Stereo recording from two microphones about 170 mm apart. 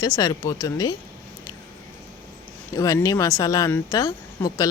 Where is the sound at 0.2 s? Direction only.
20° left (ahead or behind).